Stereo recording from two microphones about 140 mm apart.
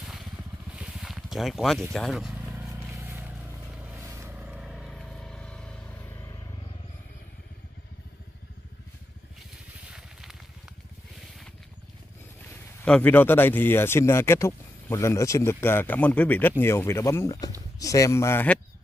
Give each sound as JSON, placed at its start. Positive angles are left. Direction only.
{"t": 0.0, "sound": "a sound", "side_deg": 0}
{"t": 2.7, "sound": "vehicle", "side_deg": -20}
{"t": 4.3, "sound": "vehicle", "side_deg": -5}
{"t": 9.8, "sound": "vehicle", "side_deg": -5}
{"t": 12.8, "sound": "speech", "side_deg": 10}